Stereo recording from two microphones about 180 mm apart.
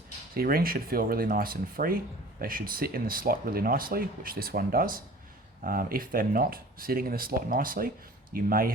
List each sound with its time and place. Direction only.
0.3 s speech: 55° right (ahead or behind)